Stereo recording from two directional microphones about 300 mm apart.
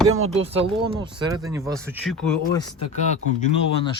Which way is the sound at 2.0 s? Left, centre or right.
Centre.